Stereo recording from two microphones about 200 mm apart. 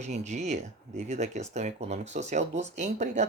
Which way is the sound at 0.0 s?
35° right (ahead or behind).